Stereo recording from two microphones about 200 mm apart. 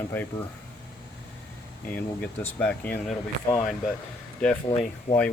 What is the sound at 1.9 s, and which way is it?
Speech, 10° left (ahead or behind).